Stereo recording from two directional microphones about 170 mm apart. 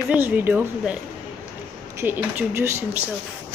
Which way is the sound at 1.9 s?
10° right (ahead or behind).